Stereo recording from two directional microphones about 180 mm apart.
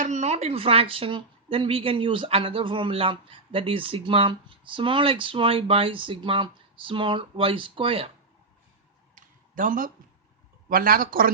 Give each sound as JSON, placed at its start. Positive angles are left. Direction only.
{"t": 0.0, "sound": "speech", "side_deg": -40}
{"t": 9.1, "sound": "a sound", "side_deg": -45}
{"t": 10.7, "sound": "speech", "side_deg": -55}